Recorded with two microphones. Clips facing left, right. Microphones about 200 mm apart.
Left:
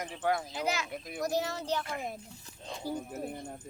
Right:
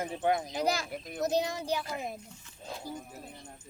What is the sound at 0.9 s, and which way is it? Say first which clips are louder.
Speech: right 1 dB; centre (ahead or behind).